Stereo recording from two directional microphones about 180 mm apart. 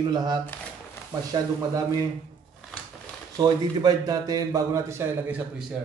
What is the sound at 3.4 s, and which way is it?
A man's voice, 20° right (ahead or behind).